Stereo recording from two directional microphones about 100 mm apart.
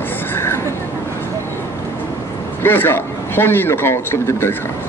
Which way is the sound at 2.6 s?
20° left (ahead or behind).